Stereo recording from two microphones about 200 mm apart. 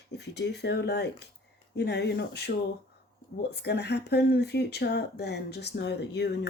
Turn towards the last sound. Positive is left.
turn(degrees=60)  # may be behind; listen again after turning